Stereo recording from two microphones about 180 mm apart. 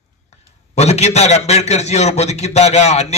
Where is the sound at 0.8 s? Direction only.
40° left (ahead or behind).